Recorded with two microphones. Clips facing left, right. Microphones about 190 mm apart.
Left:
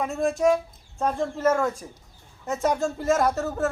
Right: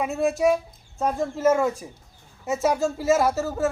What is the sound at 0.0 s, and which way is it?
Speech, 5° right (ahead or behind).